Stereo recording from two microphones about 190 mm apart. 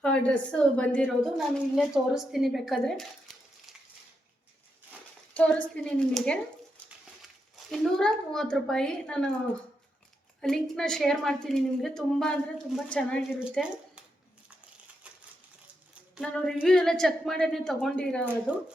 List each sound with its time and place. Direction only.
0.0 s a woman's voice: 5° left (ahead or behind)
5.3 s a woman's voice: 5° left (ahead or behind)
7.5 s a woman's voice: centre (ahead or behind)
10.4 s a woman's voice: 5° left (ahead or behind)
16.2 s a woman's voice: 5° left (ahead or behind)
18.5 s speech: 5° right (ahead or behind)